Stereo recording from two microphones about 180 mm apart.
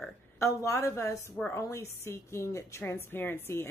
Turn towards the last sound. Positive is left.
turn(degrees=10)  # may be behind; listen again after turning